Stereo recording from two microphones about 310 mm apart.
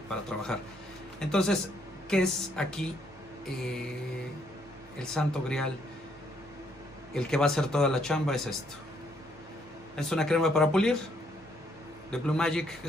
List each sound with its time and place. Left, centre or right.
0.1 s speech: centre
4.9 s speech: centre
7.2 s speech: centre
9.9 s speech: centre
12.1 s speech: centre